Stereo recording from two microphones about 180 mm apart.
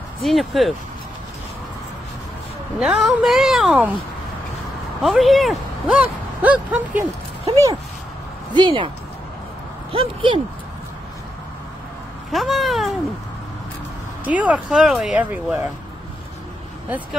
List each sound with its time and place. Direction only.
0.2 s speech: centre (ahead or behind)
2.8 s speech: 5° right (ahead or behind)
5.0 s speech: centre (ahead or behind)
8.5 s speech: 25° right (ahead or behind)
9.9 s speech: 25° right (ahead or behind)
12.3 s speech: centre (ahead or behind)
14.2 s speech: 10° right (ahead or behind)